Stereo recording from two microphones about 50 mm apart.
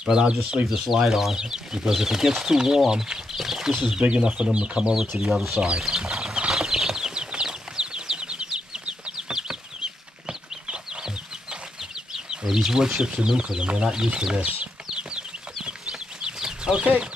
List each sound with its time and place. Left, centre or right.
0.0 s speech: centre
0.7 s speech: centre
4.9 s speech: centre
5.7 s speech: centre
6.5 s a sound: centre
8.5 s chicken: centre
12.4 s speech: centre
15.6 s chicken: centre
16.8 s speech: right